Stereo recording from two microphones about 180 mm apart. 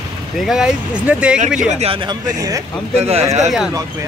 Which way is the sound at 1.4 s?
40° right (ahead or behind).